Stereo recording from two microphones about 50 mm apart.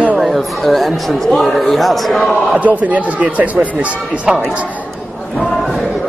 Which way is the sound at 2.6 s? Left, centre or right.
Right.